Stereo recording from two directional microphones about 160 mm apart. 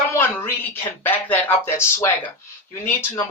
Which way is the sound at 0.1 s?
15° left (ahead or behind).